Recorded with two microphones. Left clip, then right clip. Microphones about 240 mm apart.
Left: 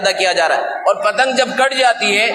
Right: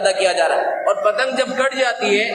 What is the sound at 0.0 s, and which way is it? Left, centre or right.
A man's voice, left.